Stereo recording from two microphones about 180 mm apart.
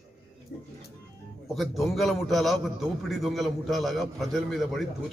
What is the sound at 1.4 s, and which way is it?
A man's voice, centre (ahead or behind).